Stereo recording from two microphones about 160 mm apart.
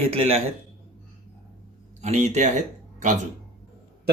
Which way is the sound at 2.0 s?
45° right (ahead or behind).